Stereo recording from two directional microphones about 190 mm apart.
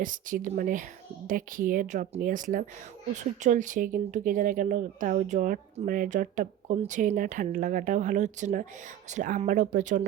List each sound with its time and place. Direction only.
0.0 s speech: 45° right (ahead or behind)